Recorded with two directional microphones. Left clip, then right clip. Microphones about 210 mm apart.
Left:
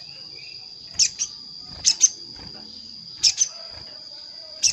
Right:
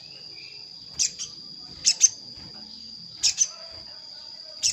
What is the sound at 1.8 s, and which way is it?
Cricket, 10° left (ahead or behind).